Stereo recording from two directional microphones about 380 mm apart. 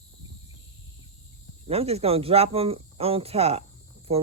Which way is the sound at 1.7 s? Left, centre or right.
Centre.